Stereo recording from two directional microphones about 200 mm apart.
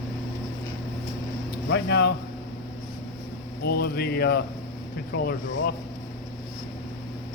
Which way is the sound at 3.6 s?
50° left (ahead or behind).